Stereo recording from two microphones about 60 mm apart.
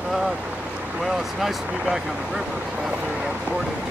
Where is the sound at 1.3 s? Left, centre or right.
Centre.